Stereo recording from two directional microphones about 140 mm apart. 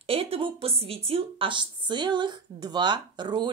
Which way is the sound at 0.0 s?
45° right (ahead or behind).